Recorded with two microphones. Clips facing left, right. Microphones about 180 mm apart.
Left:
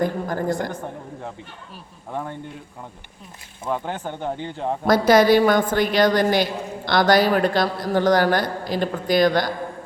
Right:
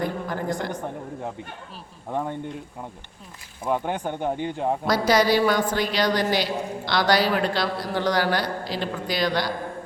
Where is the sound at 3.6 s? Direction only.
15° right (ahead or behind).